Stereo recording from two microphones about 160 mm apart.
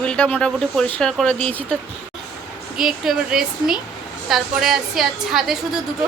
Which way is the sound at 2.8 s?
5° right (ahead or behind).